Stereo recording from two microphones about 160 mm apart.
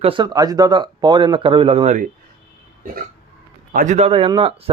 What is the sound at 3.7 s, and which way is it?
Speech, 60° right (ahead or behind).